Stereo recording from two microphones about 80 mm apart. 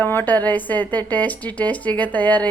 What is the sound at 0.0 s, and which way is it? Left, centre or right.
A woman's voice, left.